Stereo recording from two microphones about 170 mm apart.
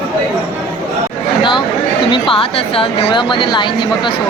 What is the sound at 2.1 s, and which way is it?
Speech, 30° left (ahead or behind).